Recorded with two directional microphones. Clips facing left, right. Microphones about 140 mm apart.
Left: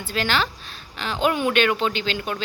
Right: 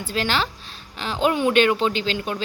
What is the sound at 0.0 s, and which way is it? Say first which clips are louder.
Speech: even; 30° right (ahead or behind).